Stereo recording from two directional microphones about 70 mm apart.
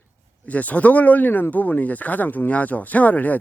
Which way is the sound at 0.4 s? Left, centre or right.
Left.